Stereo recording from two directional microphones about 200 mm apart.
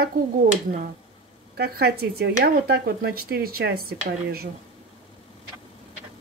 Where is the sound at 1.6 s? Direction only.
55° right (ahead or behind).